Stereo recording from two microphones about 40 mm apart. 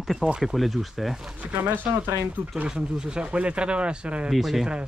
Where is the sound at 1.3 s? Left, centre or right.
Right.